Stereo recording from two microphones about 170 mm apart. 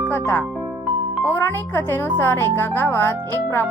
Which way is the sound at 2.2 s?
15° left (ahead or behind).